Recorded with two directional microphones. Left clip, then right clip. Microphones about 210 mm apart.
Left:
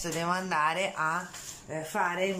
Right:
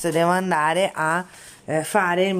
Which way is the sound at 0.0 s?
35° right (ahead or behind).